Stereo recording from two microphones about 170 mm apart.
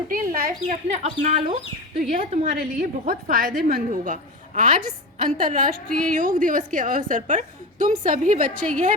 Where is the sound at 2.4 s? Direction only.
60° right (ahead or behind).